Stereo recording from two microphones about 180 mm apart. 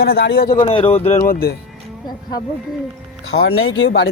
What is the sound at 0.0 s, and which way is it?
Speech, 60° left (ahead or behind).